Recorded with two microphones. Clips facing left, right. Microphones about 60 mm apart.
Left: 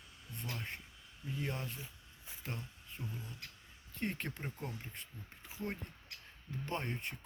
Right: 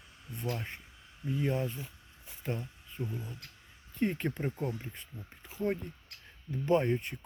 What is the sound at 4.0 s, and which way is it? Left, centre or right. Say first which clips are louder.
Speech: right 8 dB; centre.